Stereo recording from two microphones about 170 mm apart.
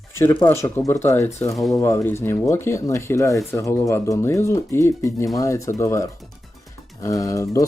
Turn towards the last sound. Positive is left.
turn(degrees=20)  # may be behind; listen again after turning